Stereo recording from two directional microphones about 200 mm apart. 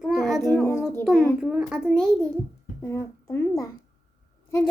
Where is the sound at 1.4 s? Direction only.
5° right (ahead or behind).